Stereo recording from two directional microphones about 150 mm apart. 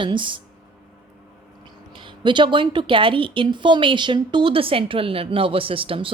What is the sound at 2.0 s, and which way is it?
A woman's voice, 30° right (ahead or behind).